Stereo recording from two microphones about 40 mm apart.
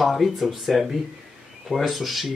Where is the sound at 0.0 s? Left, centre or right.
Centre.